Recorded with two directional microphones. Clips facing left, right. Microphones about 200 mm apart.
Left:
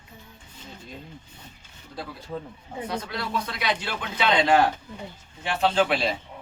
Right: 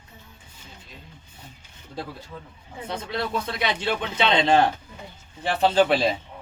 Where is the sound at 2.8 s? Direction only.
25° right (ahead or behind).